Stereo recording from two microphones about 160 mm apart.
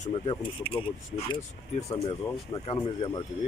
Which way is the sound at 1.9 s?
35° left (ahead or behind).